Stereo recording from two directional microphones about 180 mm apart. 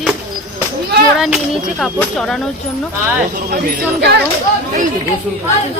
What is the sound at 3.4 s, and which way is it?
Speech, 60° right (ahead or behind).